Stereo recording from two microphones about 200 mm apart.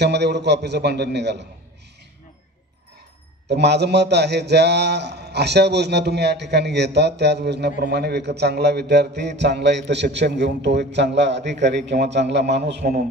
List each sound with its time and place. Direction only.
0.0 s a man's voice: 55° right (ahead or behind)
3.4 s a man's voice: 55° right (ahead or behind)